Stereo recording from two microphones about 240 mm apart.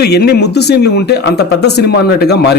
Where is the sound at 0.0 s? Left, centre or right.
Left.